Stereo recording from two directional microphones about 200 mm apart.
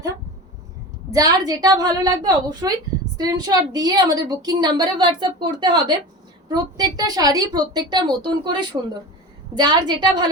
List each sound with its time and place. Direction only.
1.1 s a woman's voice: 20° right (ahead or behind)